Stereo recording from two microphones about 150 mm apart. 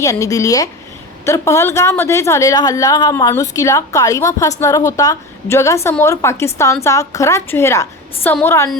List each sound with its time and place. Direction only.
0.0 s a woman's voice: 20° left (ahead or behind)